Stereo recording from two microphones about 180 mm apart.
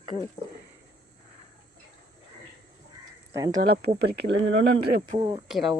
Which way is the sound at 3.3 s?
20° right (ahead or behind).